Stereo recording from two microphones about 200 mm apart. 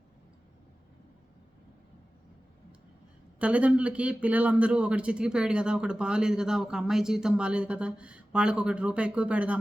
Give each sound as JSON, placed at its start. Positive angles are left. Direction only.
{"t": 3.3, "sound": "a man's voice", "side_deg": -5}